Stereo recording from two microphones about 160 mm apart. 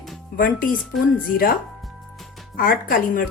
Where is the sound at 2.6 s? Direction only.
60° left (ahead or behind).